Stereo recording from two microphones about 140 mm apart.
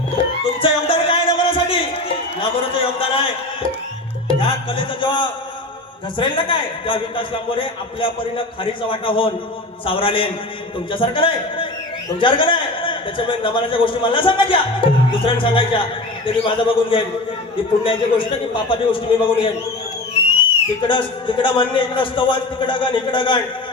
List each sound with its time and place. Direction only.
0.2 s music: 40° left (ahead or behind)
6.1 s a man's voice: 35° left (ahead or behind)
20.8 s a man's voice: 35° left (ahead or behind)